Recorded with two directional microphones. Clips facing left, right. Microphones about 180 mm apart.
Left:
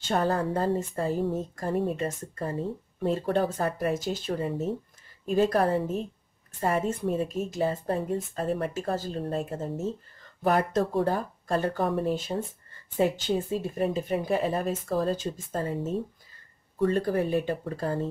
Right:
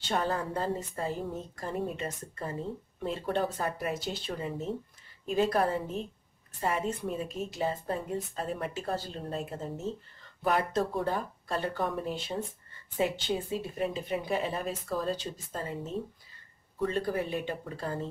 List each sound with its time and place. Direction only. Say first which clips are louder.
0.0 s speech: left 5 dB; 40° left (ahead or behind)
4.3 s speech: left 6 dB; 30° left (ahead or behind)
5.2 s speech: left 4 dB; 45° left (ahead or behind)
11.8 s speech: left 6 dB; 35° left (ahead or behind)